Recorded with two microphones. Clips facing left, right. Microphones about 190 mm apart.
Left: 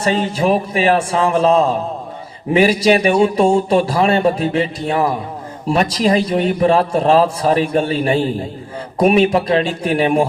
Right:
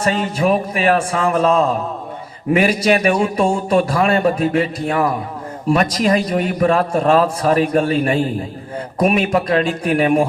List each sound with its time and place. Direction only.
0.1 s a man's voice: 30° left (ahead or behind)